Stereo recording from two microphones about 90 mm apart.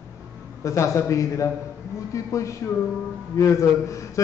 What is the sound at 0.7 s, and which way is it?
Speech, 35° left (ahead or behind).